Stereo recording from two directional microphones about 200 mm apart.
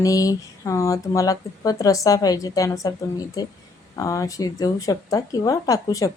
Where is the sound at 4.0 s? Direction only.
15° left (ahead or behind).